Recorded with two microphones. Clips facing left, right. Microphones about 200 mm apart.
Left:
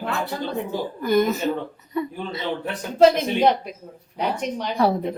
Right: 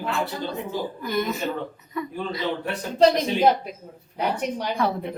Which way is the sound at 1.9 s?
25° left (ahead or behind).